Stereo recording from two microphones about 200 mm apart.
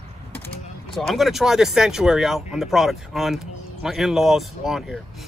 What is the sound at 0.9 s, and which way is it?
Speech, centre (ahead or behind).